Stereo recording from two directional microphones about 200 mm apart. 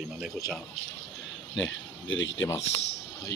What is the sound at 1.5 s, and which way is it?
Speech, 70° left (ahead or behind).